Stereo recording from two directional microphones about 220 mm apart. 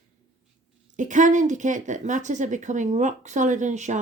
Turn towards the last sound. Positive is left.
turn(degrees=-35)  # may be behind; listen again after turning